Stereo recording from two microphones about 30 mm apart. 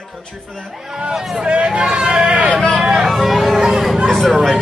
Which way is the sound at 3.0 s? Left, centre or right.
Centre.